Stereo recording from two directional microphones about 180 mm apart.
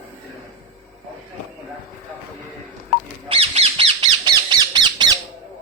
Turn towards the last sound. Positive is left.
turn(degrees=-25)  # may be behind; listen again after turning